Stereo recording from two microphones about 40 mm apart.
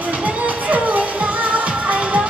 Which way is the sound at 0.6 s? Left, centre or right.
Right.